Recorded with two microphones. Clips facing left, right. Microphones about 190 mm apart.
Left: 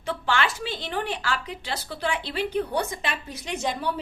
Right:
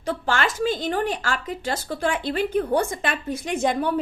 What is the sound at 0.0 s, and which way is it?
A woman's voice, 45° right (ahead or behind).